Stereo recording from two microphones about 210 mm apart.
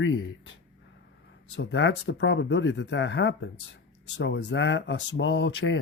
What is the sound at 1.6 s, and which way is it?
Speech, 60° left (ahead or behind).